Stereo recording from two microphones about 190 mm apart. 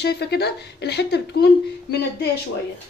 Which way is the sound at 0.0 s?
60° left (ahead or behind).